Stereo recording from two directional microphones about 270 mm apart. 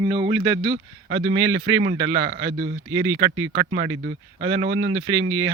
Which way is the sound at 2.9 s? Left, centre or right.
Right.